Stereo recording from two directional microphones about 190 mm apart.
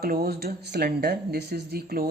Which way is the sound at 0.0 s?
50° right (ahead or behind).